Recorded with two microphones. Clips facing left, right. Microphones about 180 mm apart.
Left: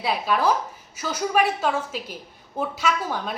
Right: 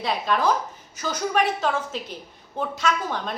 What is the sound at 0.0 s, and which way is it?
A woman's voice, 5° left (ahead or behind).